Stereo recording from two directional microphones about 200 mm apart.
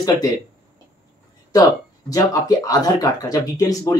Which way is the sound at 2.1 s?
15° left (ahead or behind).